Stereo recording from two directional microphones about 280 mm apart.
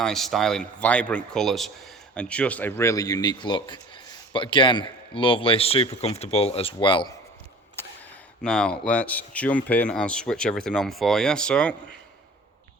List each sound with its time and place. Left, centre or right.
0.0 s speech: centre
8.4 s speech: centre